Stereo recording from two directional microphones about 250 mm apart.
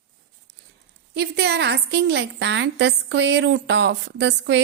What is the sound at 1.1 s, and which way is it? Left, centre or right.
A woman's voice, right.